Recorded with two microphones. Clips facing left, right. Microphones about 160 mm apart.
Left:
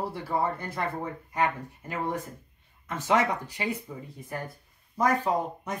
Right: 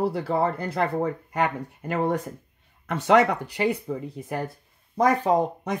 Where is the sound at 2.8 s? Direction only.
70° right (ahead or behind).